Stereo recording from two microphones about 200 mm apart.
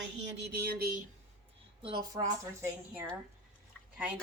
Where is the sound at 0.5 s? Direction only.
50° right (ahead or behind).